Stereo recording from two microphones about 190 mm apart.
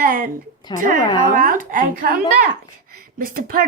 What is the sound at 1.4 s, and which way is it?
A woman's voice, 45° right (ahead or behind).